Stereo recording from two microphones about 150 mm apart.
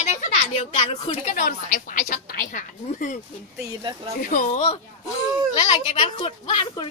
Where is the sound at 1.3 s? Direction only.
65° left (ahead or behind).